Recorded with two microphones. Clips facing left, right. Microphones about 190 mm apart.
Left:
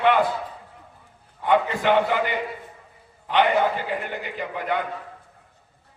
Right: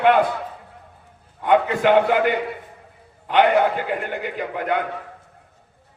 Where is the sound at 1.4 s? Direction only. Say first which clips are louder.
Right 4 dB; 55° right (ahead or behind).